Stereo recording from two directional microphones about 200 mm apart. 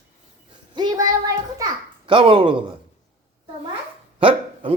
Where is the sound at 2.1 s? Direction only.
25° right (ahead or behind).